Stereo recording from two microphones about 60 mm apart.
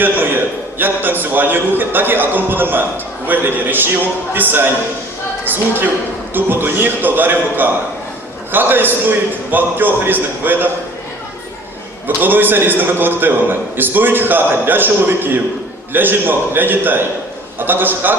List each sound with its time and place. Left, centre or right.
0.0 s a man's voice: right
12.0 s a man's voice: right